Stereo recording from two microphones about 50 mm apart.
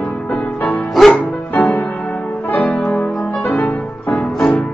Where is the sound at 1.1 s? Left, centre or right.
Left.